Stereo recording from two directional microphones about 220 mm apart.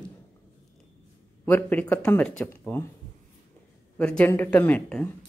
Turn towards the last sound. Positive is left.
turn(degrees=5)  # may be behind; listen again after turning